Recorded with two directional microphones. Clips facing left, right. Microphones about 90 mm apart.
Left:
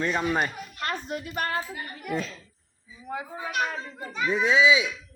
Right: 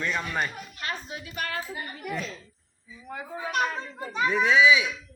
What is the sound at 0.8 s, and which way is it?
Speech, 50° left (ahead or behind).